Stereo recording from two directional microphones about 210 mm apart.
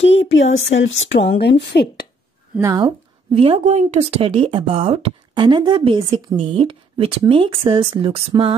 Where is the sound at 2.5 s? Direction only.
15° right (ahead or behind).